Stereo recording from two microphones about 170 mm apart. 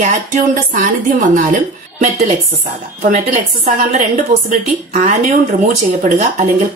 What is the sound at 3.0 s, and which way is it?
Speech, 55° right (ahead or behind).